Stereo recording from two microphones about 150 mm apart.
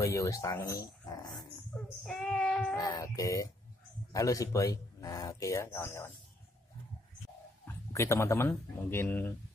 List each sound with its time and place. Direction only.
0.0 s speech: 20° left (ahead or behind)
1.7 s speech: 10° left (ahead or behind)
2.0 s child singing: 5° left (ahead or behind)
2.7 s speech: 20° left (ahead or behind)
7.6 s speech: 20° left (ahead or behind)